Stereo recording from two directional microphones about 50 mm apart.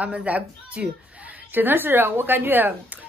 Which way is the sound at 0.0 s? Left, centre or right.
Right.